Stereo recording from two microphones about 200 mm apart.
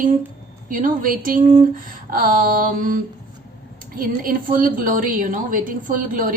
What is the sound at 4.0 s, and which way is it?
A woman's voice, 45° right (ahead or behind).